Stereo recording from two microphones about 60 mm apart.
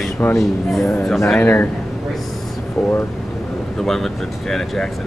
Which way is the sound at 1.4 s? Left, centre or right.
Left.